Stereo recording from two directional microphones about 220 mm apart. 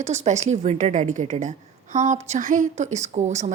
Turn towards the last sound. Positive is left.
turn(degrees=-30)  # may be behind; listen again after turning